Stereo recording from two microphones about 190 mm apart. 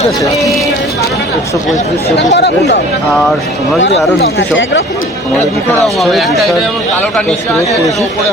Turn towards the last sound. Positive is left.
turn(degrees=0)  # may be behind; listen again after turning